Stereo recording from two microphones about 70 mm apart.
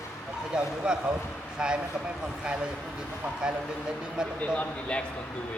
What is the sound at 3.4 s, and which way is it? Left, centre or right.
Speech, centre.